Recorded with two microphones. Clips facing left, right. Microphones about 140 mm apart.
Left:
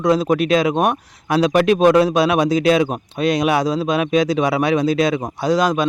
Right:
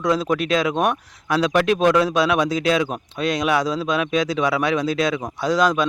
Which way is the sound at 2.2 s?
10° left (ahead or behind).